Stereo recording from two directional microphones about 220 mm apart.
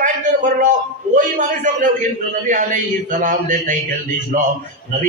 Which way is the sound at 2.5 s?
35° right (ahead or behind).